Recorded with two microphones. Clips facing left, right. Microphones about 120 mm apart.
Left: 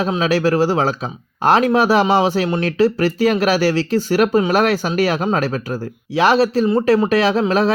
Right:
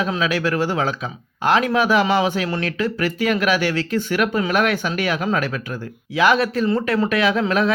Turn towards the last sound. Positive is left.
turn(degrees=30)  # may be behind; listen again after turning